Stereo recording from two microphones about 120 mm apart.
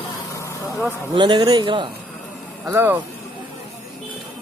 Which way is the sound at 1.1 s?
40° right (ahead or behind).